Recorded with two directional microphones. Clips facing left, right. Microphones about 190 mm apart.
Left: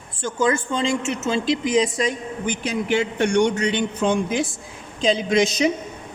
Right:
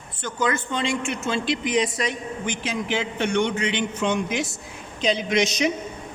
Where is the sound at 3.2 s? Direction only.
45° left (ahead or behind).